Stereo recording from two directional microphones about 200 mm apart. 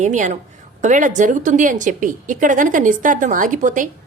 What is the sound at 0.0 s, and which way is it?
A woman's voice, 35° right (ahead or behind).